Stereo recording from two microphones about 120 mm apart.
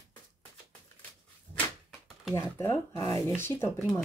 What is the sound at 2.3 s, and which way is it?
Speech, 25° left (ahead or behind).